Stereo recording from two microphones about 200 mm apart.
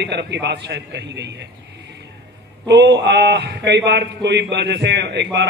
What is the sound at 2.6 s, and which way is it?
A man's voice, 60° right (ahead or behind).